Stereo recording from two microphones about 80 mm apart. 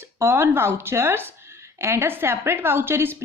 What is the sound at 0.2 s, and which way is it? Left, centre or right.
A woman's voice, right.